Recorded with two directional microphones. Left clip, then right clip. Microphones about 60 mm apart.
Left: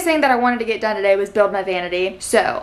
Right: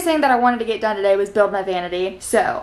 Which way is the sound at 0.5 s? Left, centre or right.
Centre.